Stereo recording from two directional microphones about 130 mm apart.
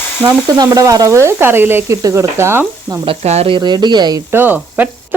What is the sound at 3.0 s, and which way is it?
Sizzle, 50° right (ahead or behind).